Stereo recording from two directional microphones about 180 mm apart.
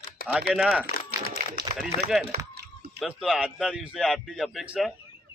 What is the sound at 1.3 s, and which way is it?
Speech, 55° right (ahead or behind).